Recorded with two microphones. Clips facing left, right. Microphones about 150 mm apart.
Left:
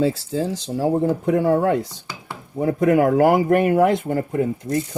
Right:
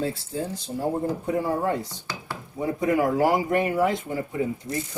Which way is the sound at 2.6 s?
60° left (ahead or behind).